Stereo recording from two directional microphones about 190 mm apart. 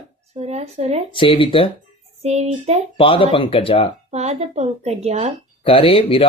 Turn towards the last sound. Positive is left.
turn(degrees=30)  # may be behind; listen again after turning